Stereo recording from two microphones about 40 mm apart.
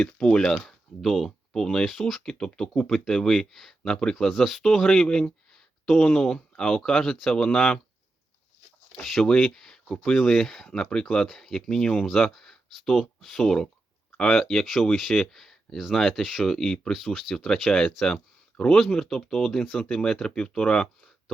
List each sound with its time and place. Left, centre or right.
0.0 s speech: left
1.0 s speech: centre
2.2 s speech: centre
3.5 s speech: centre
3.8 s speech: centre
4.6 s speech: centre
5.0 s speech: left
9.2 s speech: centre
11.3 s speech: centre
17.3 s speech: centre